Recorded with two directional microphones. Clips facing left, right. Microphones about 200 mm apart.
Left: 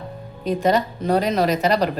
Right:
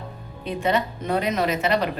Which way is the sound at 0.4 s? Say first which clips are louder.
Left 4 dB; 40° left (ahead or behind).